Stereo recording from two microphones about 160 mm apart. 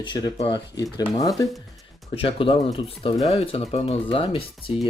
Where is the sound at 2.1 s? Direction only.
35° left (ahead or behind).